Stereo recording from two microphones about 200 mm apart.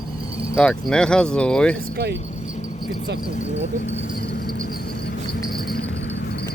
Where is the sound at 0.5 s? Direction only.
5° left (ahead or behind).